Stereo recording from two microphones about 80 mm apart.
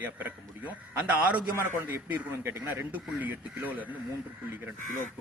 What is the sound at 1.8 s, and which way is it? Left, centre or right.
A man's voice, right.